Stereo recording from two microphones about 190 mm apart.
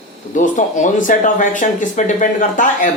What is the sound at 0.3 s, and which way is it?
Speech, 40° left (ahead or behind).